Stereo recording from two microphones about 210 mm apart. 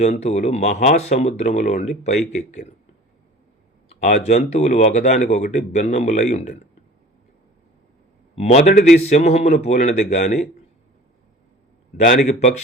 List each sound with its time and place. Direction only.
0.0 s speech: 30° left (ahead or behind)
3.8 s speech: 30° left (ahead or behind)
8.4 s speech: 35° left (ahead or behind)
12.2 s speech: 35° left (ahead or behind)